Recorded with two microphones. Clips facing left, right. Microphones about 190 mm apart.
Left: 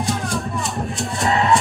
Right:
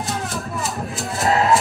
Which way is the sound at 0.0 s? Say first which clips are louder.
Left 3 dB; centre (ahead or behind).